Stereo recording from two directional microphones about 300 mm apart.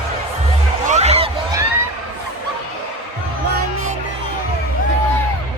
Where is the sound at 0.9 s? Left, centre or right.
Right.